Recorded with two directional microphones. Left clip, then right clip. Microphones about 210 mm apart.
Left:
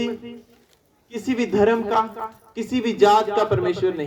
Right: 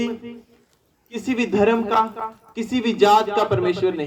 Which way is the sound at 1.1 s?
30° right (ahead or behind).